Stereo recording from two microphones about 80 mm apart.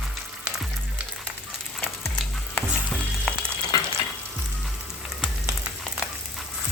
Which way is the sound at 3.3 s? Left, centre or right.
Centre.